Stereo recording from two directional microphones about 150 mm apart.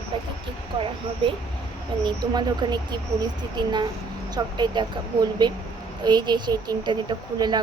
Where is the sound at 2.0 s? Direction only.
30° right (ahead or behind).